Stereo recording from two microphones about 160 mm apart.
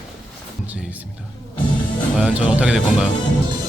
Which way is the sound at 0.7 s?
10° right (ahead or behind).